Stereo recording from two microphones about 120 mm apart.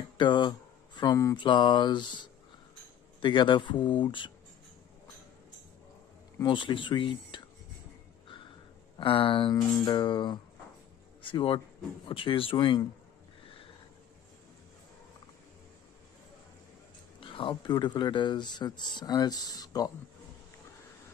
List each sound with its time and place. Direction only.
0.2 s speech: 40° left (ahead or behind)
1.3 s speech: 40° left (ahead or behind)
6.4 s speech: 45° left (ahead or behind)
8.9 s speech: 45° left (ahead or behind)
17.2 s speech: 45° left (ahead or behind)